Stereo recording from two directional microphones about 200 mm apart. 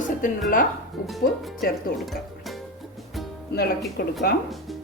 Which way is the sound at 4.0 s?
55° left (ahead or behind).